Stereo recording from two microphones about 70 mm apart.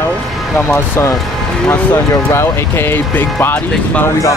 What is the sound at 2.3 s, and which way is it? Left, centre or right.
Speech, left.